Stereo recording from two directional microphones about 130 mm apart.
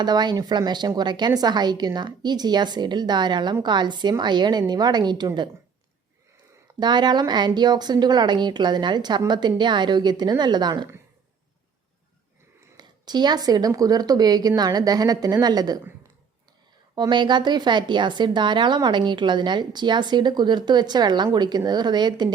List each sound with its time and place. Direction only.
0.0 s speech: 35° right (ahead or behind)
6.7 s speech: 35° right (ahead or behind)
12.7 s speech: 35° right (ahead or behind)
16.9 s speech: 35° right (ahead or behind)